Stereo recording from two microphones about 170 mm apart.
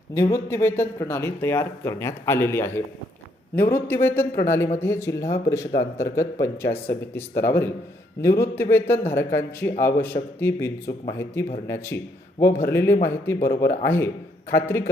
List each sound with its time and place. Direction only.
0.1 s speech: 15° left (ahead or behind)